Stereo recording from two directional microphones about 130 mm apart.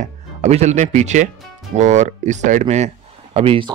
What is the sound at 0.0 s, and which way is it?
Speech, 60° right (ahead or behind).